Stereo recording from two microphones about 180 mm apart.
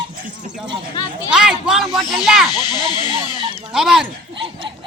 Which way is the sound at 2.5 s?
20° left (ahead or behind).